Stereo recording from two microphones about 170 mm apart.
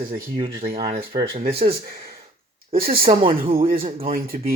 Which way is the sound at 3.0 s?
35° right (ahead or behind).